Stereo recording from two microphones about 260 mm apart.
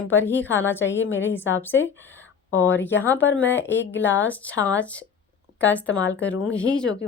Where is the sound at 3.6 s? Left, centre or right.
Left.